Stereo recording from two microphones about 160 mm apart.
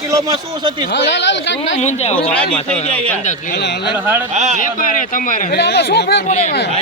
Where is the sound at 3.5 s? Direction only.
90° left.